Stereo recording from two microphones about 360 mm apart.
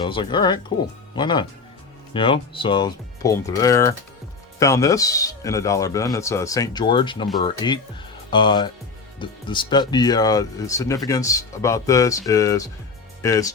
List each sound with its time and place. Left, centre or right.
0.0 s speech: centre